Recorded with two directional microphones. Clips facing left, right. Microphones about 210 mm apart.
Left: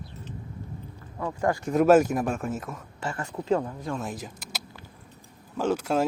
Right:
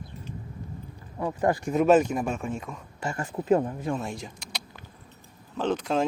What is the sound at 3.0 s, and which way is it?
Speech, 10° right (ahead or behind).